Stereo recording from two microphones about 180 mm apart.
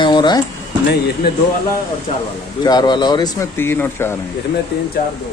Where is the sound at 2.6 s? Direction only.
25° left (ahead or behind).